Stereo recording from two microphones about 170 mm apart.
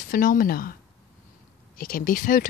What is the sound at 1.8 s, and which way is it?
Speech, 55° left (ahead or behind).